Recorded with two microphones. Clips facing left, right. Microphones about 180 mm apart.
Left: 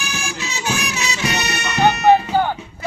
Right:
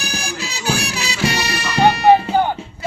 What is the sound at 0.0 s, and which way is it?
Music, 35° right (ahead or behind).